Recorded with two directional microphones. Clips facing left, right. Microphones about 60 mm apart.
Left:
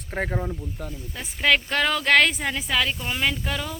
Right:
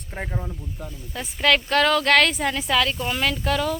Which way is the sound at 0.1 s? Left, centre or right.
Left.